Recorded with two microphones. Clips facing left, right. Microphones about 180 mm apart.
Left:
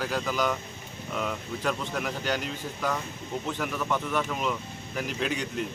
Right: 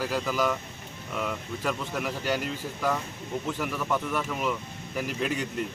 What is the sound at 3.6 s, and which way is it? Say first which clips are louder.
Speech: even; 5° right (ahead or behind).